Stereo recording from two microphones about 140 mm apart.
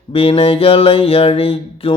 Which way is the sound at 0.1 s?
45° left (ahead or behind).